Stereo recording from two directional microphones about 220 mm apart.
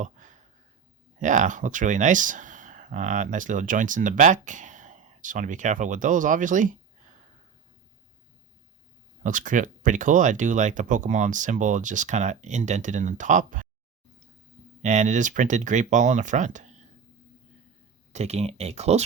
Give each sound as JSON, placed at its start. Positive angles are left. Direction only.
{"t": 0.0, "sound": "a sound", "side_deg": -35}
{"t": 1.2, "sound": "speech", "side_deg": -35}
{"t": 9.2, "sound": "speech", "side_deg": -35}
{"t": 14.8, "sound": "speech", "side_deg": -35}
{"t": 18.1, "sound": "speech", "side_deg": -30}